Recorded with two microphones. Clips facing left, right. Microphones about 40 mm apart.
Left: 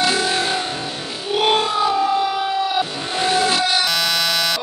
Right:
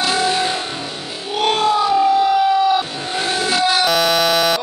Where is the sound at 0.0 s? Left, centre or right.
Centre.